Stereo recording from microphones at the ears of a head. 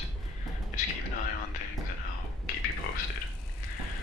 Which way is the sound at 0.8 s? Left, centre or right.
Left.